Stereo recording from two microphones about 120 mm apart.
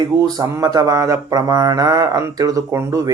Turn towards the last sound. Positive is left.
turn(degrees=-25)  # may be behind; listen again after turning